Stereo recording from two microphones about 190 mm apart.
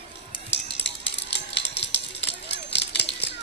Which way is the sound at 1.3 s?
65° left (ahead or behind).